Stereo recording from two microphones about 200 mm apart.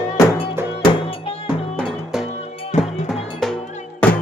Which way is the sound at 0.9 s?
25° left (ahead or behind).